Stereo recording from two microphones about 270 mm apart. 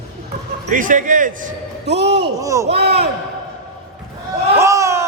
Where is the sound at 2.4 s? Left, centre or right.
Centre.